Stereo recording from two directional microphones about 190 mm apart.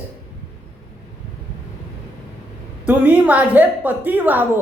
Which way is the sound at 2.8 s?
10° right (ahead or behind).